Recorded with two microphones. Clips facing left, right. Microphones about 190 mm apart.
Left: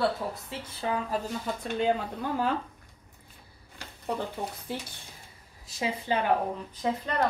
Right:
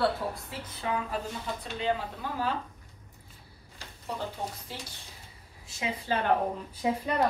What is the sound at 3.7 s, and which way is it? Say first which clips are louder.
Speech: left 4 dB; 60° left (ahead or behind).